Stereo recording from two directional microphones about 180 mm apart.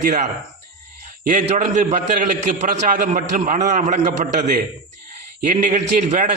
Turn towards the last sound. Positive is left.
turn(degrees=-45)  # may be behind; listen again after turning